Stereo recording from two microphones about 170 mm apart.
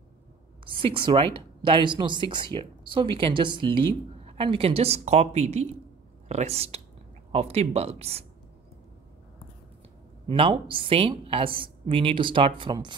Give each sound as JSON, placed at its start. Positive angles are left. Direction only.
{"t": 0.7, "sound": "a woman's voice", "side_deg": -30}
{"t": 10.2, "sound": "a woman's voice", "side_deg": -30}